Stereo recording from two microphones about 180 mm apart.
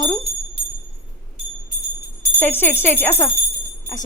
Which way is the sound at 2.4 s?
10° left (ahead or behind).